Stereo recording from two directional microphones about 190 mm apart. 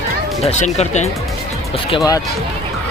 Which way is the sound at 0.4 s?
35° left (ahead or behind).